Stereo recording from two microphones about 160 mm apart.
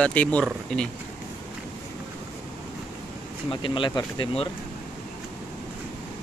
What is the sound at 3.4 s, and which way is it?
Speech, 30° left (ahead or behind).